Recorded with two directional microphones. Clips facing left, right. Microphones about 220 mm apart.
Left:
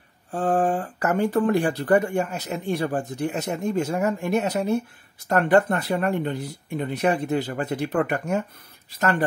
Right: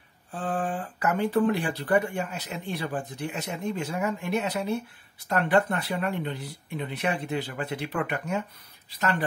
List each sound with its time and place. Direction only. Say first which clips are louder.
0.3 s speech: left 8 dB; 45° left (ahead or behind)